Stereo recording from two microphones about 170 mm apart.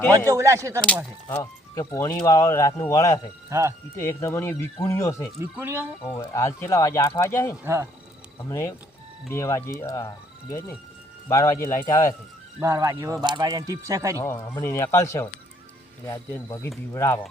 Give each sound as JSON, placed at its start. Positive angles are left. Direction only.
{"t": 0.3, "sound": "speech", "side_deg": -15}
{"t": 1.3, "sound": "speech", "side_deg": 20}
{"t": 3.5, "sound": "speech", "side_deg": -15}
{"t": 3.9, "sound": "speech", "side_deg": 15}
{"t": 5.4, "sound": "speech", "side_deg": -15}
{"t": 6.0, "sound": "speech", "side_deg": 20}
{"t": 7.6, "sound": "speech", "side_deg": -15}
{"t": 8.4, "sound": "speech", "side_deg": 15}
{"t": 11.3, "sound": "speech", "side_deg": 15}
{"t": 12.5, "sound": "speech", "side_deg": -20}
{"t": 14.2, "sound": "speech", "side_deg": 15}